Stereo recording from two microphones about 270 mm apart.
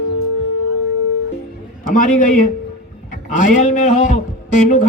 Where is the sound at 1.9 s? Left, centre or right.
Left.